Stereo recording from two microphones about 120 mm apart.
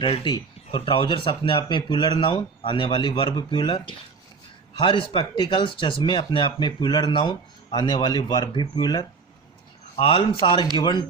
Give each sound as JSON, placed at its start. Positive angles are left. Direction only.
{"t": 0.0, "sound": "speech", "side_deg": 50}
{"t": 9.9, "sound": "speech", "side_deg": 50}
{"t": 10.4, "sound": "speech", "side_deg": 40}